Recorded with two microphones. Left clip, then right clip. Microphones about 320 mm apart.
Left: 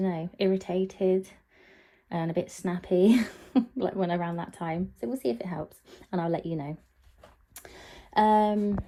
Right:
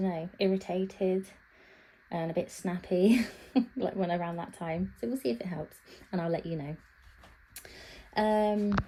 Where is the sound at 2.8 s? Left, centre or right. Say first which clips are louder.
Left 3 dB; left.